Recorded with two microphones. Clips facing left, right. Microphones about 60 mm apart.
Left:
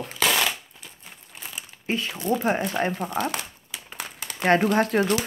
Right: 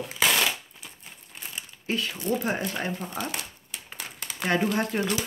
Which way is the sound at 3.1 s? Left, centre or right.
Left.